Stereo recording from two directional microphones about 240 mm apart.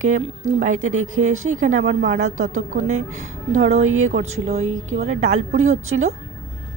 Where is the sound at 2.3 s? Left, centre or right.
Right.